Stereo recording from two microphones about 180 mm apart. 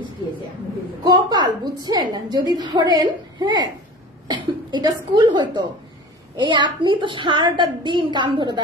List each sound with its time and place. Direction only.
1.0 s a woman's voice: 25° right (ahead or behind)